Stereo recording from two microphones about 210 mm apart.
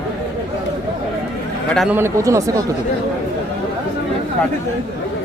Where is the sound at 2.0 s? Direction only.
15° right (ahead or behind).